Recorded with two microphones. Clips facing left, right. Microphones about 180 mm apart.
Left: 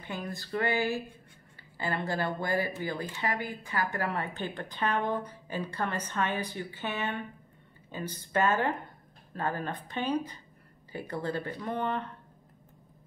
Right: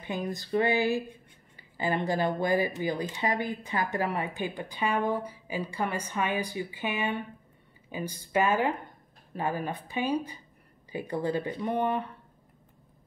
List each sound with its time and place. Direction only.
0.0 s speech: 15° right (ahead or behind)